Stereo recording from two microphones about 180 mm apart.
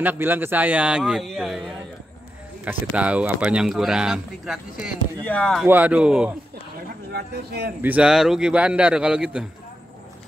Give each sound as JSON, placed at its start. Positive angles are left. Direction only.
{"t": 0.0, "sound": "a man's voice", "side_deg": -10}
{"t": 2.6, "sound": "speech", "side_deg": -5}
{"t": 5.2, "sound": "speech", "side_deg": 5}
{"t": 5.7, "sound": "a man's voice", "side_deg": -10}
{"t": 7.1, "sound": "speech", "side_deg": -65}
{"t": 7.8, "sound": "speech", "side_deg": -5}